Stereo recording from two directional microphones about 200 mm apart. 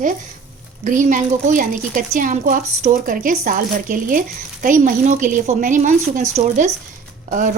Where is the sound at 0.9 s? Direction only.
40° right (ahead or behind).